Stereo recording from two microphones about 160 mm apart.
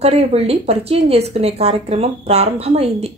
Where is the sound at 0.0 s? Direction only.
40° right (ahead or behind).